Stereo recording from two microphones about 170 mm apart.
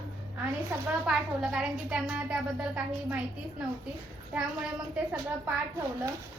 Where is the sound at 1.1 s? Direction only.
5° right (ahead or behind).